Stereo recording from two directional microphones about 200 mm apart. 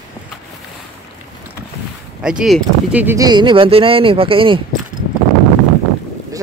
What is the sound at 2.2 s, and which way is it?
Speech, centre (ahead or behind).